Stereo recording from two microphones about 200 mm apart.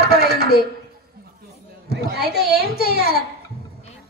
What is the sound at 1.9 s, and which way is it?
A man's voice, 55° right (ahead or behind).